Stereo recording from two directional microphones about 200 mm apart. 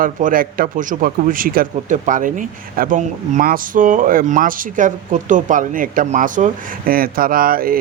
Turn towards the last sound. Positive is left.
turn(degrees=-45)  # may be behind; listen again after turning